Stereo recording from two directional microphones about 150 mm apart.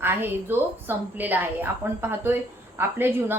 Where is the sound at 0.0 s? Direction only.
15° right (ahead or behind).